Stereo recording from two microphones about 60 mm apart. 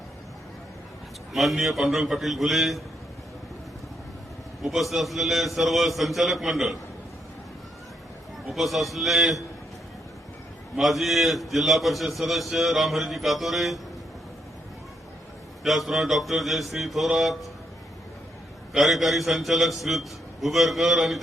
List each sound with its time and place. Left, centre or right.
1.3 s a man's voice: centre
4.6 s a man's voice: centre
8.4 s a man's voice: centre
10.8 s a man's voice: centre
15.6 s a man's voice: centre
18.7 s a man's voice: centre